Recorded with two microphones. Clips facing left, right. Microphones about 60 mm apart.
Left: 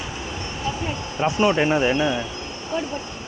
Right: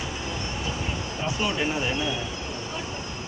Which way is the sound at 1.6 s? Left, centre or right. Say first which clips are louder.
Left 7 dB; left.